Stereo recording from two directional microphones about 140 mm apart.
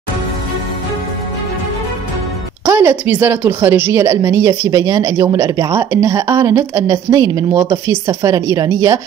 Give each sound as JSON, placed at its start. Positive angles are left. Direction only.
{"t": 2.6, "sound": "a woman's voice", "side_deg": -20}